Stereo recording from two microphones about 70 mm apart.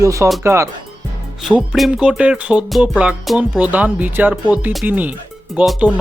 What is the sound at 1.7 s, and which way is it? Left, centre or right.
Speech, centre.